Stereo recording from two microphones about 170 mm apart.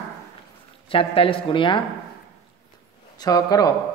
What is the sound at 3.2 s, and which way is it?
Speech, 20° left (ahead or behind).